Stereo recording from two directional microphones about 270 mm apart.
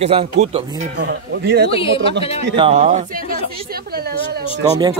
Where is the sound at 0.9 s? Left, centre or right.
Right.